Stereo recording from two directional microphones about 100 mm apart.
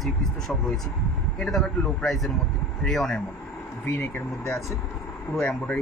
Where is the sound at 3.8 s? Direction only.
25° left (ahead or behind).